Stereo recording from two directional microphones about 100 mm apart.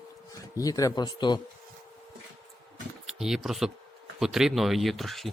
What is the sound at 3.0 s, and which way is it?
Speech, 5° right (ahead or behind).